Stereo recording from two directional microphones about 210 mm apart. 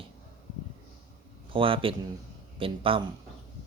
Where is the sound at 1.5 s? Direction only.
25° right (ahead or behind).